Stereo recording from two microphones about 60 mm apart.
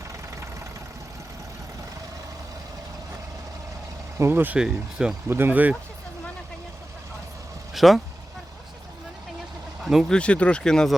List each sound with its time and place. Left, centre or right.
4.2 s speech: right
4.5 s speech: centre
5.3 s speech: right
7.7 s speech: centre
9.8 s speech: centre
10.1 s speech: centre